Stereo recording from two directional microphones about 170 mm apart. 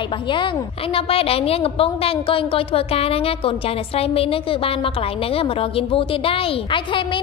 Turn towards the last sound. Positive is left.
turn(degrees=30)  # may be behind; listen again after turning